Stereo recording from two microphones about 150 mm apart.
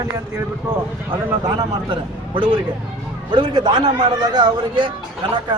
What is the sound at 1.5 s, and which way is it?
A man's voice, 30° right (ahead or behind).